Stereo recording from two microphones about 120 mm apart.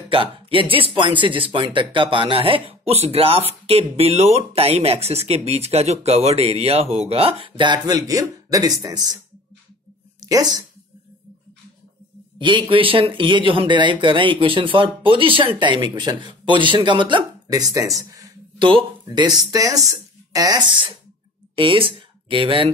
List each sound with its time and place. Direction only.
0.1 s speech: 45° right (ahead or behind)
10.2 s speech: 35° right (ahead or behind)
12.4 s speech: 40° right (ahead or behind)
18.6 s speech: 45° right (ahead or behind)
21.5 s speech: 45° right (ahead or behind)